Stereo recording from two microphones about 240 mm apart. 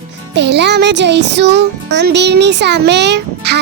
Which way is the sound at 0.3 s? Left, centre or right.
Right.